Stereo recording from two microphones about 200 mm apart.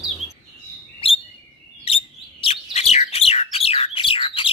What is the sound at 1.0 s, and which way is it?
Chirp, 25° left (ahead or behind).